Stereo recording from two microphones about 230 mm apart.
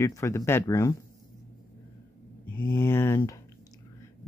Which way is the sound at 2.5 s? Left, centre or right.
Centre.